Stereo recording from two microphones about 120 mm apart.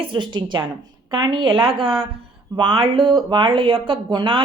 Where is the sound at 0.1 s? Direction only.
40° right (ahead or behind).